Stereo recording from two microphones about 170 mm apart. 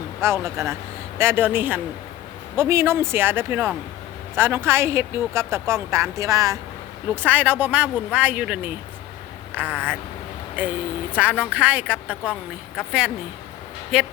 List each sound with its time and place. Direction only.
0.2 s speech: 15° right (ahead or behind)